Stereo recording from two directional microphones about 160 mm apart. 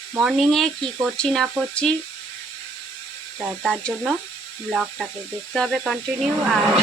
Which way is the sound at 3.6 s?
Centre (ahead or behind).